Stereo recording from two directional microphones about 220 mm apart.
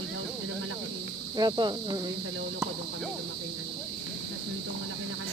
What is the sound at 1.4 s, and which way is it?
Speech, 20° right (ahead or behind).